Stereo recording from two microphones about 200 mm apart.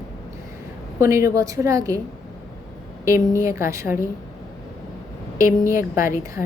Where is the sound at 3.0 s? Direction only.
15° right (ahead or behind).